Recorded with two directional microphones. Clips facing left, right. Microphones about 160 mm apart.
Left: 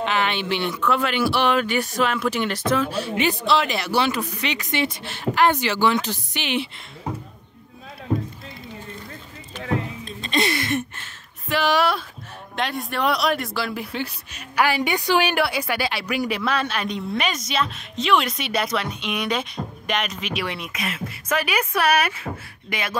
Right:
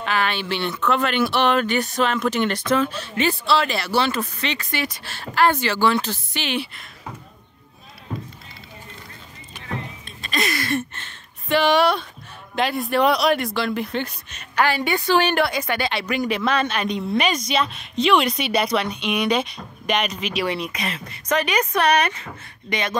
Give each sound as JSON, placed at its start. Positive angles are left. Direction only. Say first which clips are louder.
{"t": 0.0, "sound": "speech", "louder": "even", "side_deg": 20}
{"t": 10.0, "sound": "a sound", "louder": "left 1 dB", "side_deg": 30}
{"t": 11.0, "sound": "speech", "louder": "right 1 dB", "side_deg": 5}